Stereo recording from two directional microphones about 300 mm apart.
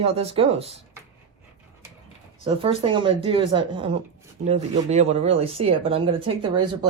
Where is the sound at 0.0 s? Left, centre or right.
Centre.